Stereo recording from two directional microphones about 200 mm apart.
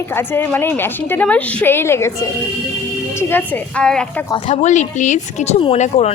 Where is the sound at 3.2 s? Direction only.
10° left (ahead or behind).